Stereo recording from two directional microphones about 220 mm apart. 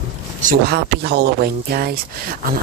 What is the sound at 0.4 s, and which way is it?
Speech, 40° right (ahead or behind).